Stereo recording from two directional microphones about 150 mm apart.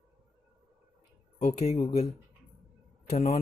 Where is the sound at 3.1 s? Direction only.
45° left (ahead or behind).